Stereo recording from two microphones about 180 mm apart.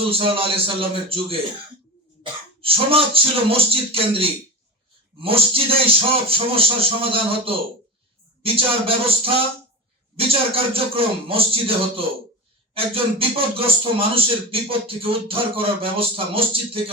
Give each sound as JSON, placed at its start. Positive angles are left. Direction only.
{"t": 0.0, "sound": "speech", "side_deg": -30}